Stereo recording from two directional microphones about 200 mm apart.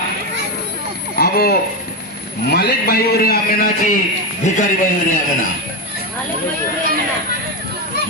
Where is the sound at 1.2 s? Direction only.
50° left (ahead or behind).